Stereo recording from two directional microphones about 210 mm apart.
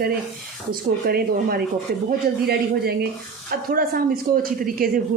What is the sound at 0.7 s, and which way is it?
A woman's voice, 45° right (ahead or behind).